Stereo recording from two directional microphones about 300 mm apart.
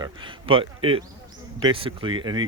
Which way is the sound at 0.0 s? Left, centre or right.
Centre.